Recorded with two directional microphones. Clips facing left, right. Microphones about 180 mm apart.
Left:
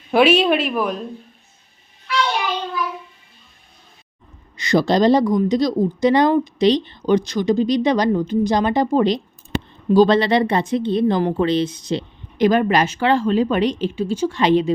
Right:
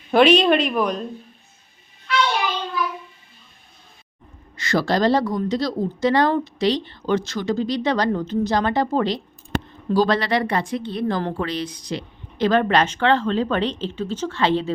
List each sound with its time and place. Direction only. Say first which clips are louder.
0.1 s a woman's voice: even; 5° left (ahead or behind)
4.5 s a woman's voice: left 4 dB; 15° left (ahead or behind)
12.5 s speech: left 1 dB; 10° left (ahead or behind)